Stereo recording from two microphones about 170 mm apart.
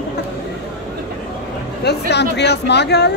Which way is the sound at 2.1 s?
80° left.